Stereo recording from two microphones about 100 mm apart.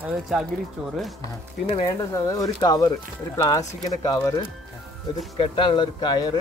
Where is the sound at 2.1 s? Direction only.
35° left (ahead or behind).